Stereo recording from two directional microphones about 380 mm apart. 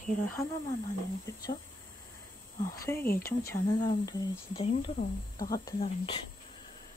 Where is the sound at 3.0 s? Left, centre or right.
Left.